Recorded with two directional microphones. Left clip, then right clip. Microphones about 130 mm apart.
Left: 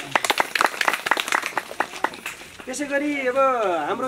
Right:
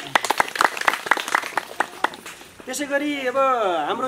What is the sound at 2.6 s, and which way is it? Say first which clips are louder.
Speech: right 1 dB; 15° right (ahead or behind).